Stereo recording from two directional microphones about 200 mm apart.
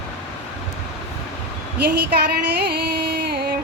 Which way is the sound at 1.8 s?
50° right (ahead or behind).